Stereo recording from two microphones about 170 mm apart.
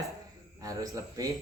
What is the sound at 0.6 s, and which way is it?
Speech, 20° right (ahead or behind).